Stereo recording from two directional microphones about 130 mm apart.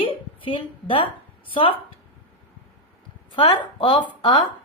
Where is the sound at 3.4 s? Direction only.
35° left (ahead or behind).